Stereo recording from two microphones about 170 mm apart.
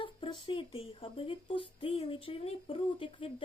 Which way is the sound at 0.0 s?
30° left (ahead or behind).